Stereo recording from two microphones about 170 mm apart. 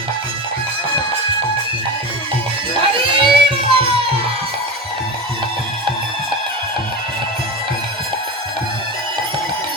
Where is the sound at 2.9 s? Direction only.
30° right (ahead or behind).